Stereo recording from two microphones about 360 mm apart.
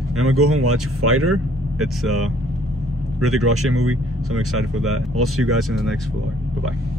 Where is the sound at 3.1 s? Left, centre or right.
Right.